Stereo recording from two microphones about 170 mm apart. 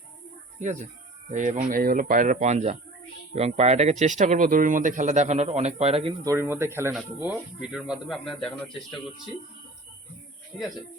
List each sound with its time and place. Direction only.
0.6 s speech: 45° right (ahead or behind)
6.2 s speech: 15° right (ahead or behind); by 9.1 s 5° left (ahead or behind)
10.5 s speech: 5° left (ahead or behind)